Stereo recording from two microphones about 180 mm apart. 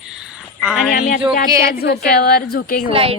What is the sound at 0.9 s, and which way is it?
A woman's voice, 55° left (ahead or behind).